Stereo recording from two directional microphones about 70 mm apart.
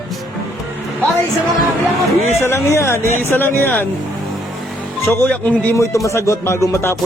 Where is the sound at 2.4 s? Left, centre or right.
Left.